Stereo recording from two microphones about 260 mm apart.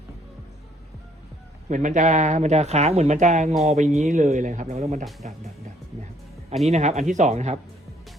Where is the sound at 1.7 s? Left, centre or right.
Right.